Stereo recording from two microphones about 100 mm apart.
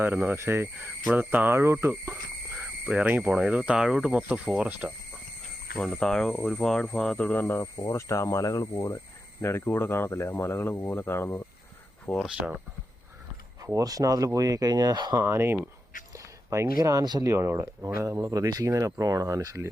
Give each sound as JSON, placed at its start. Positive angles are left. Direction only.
{"t": 0.0, "sound": "speech", "side_deg": -20}
{"t": 2.8, "sound": "speech", "side_deg": -15}
{"t": 5.7, "sound": "speech", "side_deg": 5}
{"t": 9.4, "sound": "speech", "side_deg": 25}
{"t": 12.0, "sound": "speech", "side_deg": 10}
{"t": 12.4, "sound": "speech", "side_deg": -15}
{"t": 13.7, "sound": "speech", "side_deg": -35}
{"t": 15.2, "sound": "speech", "side_deg": -25}